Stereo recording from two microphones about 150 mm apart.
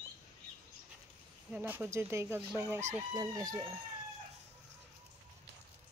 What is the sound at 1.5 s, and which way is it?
Speech, 10° right (ahead or behind).